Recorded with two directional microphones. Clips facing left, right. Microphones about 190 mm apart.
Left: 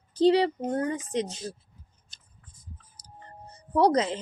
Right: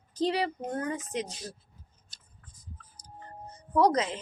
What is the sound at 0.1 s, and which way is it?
Speech, 30° left (ahead or behind).